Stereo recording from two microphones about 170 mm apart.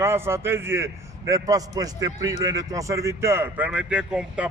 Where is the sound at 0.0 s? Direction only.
15° right (ahead or behind).